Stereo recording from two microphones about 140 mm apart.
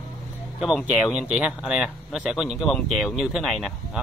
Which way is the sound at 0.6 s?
Centre (ahead or behind).